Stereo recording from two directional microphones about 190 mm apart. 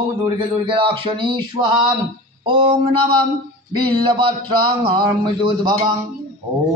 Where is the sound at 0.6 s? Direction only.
25° right (ahead or behind).